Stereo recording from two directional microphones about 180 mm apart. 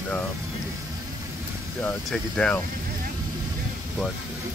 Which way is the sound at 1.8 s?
5° left (ahead or behind).